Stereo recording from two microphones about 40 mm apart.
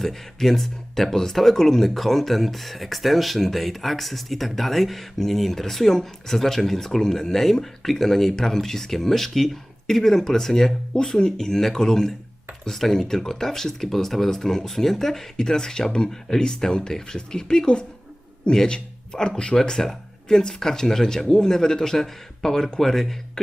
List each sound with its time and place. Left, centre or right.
0.0 s speech: centre